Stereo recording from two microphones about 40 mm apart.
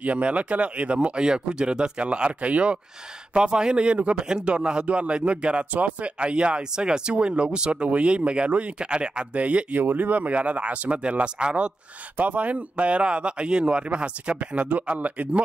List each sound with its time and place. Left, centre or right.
0.0 s speech: right
9.8 s speech: right
12.2 s speech: right